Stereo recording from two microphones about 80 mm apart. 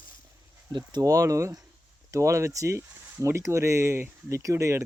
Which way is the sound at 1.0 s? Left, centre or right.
Right.